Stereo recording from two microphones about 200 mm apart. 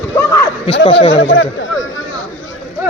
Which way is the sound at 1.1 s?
60° left (ahead or behind).